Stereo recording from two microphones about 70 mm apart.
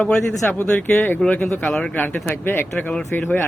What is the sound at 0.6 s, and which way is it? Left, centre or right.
Speech, left.